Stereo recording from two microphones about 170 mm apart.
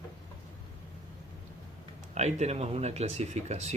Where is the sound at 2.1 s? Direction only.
40° right (ahead or behind).